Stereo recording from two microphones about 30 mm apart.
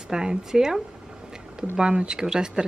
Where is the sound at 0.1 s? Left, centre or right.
Right.